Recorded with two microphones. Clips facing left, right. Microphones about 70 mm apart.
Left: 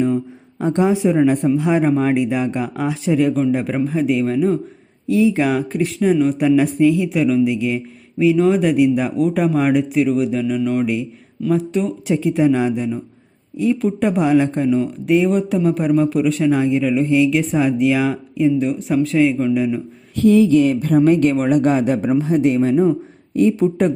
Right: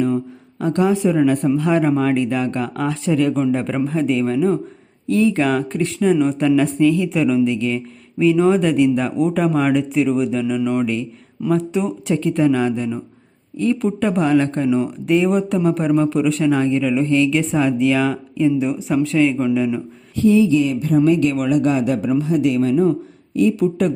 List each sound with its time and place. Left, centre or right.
0.6 s speech: left; by 12.1 s centre
12.1 s speech: centre
20.1 s speech: left